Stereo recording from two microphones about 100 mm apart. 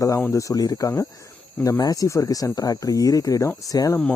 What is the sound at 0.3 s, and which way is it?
Speech, 30° left (ahead or behind).